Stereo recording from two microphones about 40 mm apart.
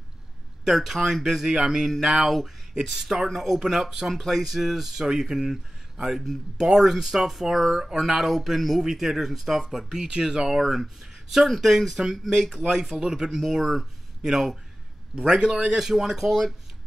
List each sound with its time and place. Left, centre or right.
0.7 s speech: centre
10.1 s a man's voice: centre